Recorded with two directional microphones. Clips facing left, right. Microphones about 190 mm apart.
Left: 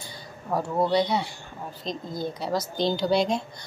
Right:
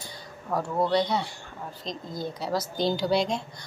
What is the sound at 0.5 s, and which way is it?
A woman's voice, 5° left (ahead or behind).